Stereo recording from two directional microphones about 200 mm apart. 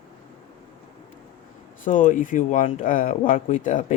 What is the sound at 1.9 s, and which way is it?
Speech, 40° left (ahead or behind).